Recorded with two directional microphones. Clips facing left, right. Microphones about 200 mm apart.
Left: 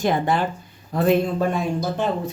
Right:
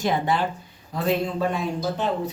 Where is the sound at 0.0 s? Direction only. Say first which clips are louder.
Left 2 dB; 50° left (ahead or behind).